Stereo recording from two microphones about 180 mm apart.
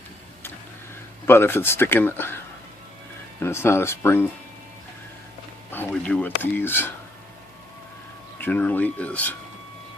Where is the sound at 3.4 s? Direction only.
15° left (ahead or behind).